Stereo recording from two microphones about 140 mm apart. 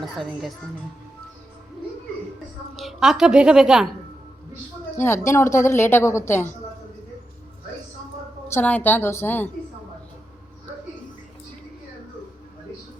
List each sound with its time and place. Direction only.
0.0 s a woman's voice: centre (ahead or behind)
2.7 s a woman's voice: centre (ahead or behind)
4.9 s a woman's voice: 15° left (ahead or behind)
8.5 s a woman's voice: 10° left (ahead or behind)